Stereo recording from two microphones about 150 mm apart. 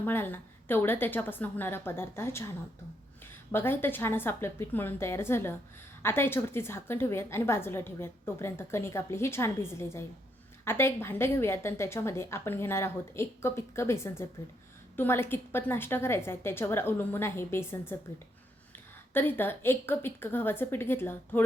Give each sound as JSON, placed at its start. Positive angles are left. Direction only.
{"t": 0.0, "sound": "a woman's voice", "side_deg": 15}
{"t": 3.5, "sound": "a woman's voice", "side_deg": 15}
{"t": 19.1, "sound": "a woman's voice", "side_deg": 15}